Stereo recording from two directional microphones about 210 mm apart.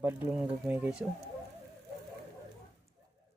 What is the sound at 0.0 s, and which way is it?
Speech, 10° right (ahead or behind).